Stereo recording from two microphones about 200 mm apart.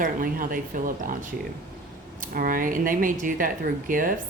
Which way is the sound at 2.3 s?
45° right (ahead or behind).